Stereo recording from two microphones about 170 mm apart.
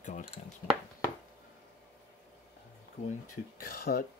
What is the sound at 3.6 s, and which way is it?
Speech, 60° left (ahead or behind).